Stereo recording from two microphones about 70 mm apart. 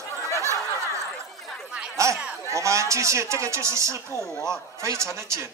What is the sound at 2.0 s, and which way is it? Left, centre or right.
Speech, right.